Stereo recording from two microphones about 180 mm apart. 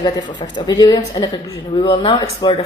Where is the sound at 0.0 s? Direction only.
25° left (ahead or behind).